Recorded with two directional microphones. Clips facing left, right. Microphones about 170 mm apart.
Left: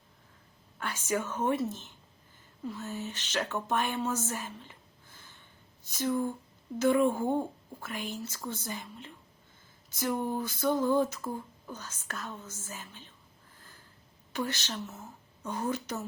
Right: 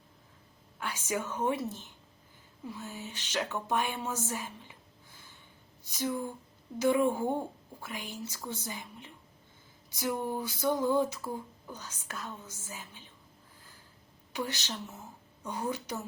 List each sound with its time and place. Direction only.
0.8 s speech: 10° right (ahead or behind)
14.3 s speech: 15° right (ahead or behind)